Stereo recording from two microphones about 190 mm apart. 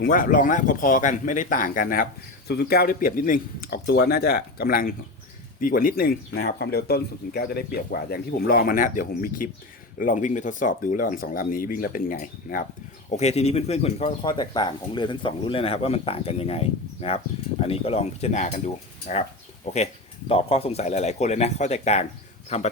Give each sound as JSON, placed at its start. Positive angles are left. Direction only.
{"t": 0.0, "sound": "speech", "side_deg": 50}
{"t": 13.1, "sound": "speech", "side_deg": 35}